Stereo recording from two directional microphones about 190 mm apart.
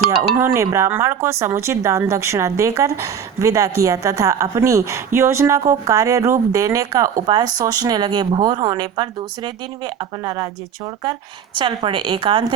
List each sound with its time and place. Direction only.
0.3 s speech: 15° right (ahead or behind)
11.5 s speech: 25° right (ahead or behind)